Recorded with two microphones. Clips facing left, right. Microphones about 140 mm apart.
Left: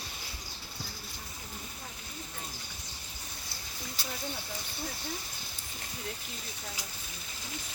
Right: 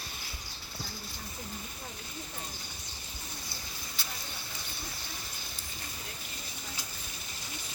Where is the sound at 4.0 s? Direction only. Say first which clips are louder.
Left 3 dB; 35° left (ahead or behind).